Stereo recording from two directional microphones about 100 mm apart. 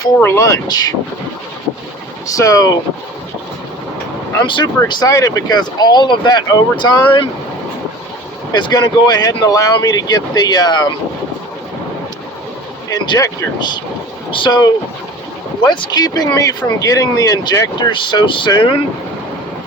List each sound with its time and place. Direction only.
0.2 s speech: 25° left (ahead or behind)
0.7 s speech: 40° left (ahead or behind)
2.2 s speech: 35° left (ahead or behind)
4.4 s speech: 50° left (ahead or behind)
4.9 s speech: 40° left (ahead or behind)
8.5 s speech: 50° left (ahead or behind)
12.9 s speech: 35° left (ahead or behind)
14.3 s speech: 55° left (ahead or behind)